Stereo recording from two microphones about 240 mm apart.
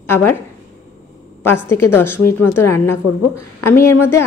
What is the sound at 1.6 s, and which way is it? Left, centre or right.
A woman's voice, centre.